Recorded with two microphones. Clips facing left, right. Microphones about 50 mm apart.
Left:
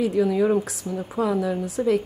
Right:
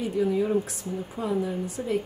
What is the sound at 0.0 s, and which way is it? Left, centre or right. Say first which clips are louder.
A woman's voice: left 5 dB; left.